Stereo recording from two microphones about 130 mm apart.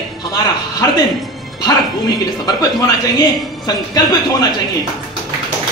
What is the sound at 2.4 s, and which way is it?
A man's voice, 30° left (ahead or behind).